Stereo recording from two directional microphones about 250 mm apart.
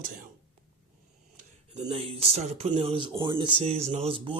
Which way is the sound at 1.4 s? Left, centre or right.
Right.